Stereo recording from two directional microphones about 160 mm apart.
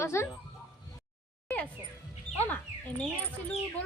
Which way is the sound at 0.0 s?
15° left (ahead or behind).